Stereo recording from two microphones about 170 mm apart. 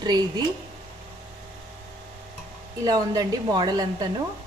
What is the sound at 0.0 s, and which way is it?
Speech, 25° right (ahead or behind).